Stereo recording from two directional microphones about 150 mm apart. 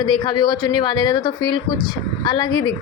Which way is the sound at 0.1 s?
30° left (ahead or behind).